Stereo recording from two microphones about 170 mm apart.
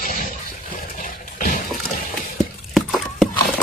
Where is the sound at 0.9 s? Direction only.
50° left (ahead or behind).